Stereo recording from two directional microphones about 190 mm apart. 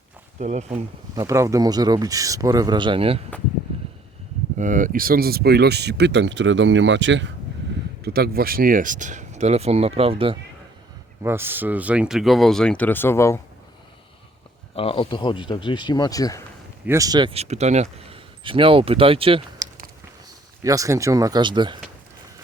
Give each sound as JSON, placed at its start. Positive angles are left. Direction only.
{"t": 0.3, "sound": "speech", "side_deg": -35}
{"t": 1.1, "sound": "speech", "side_deg": -15}
{"t": 4.5, "sound": "speech", "side_deg": -45}
{"t": 8.0, "sound": "speech", "side_deg": -55}
{"t": 11.2, "sound": "speech", "side_deg": -10}
{"t": 14.8, "sound": "speech", "side_deg": 30}
{"t": 16.8, "sound": "speech", "side_deg": -15}
{"t": 20.7, "sound": "speech", "side_deg": -15}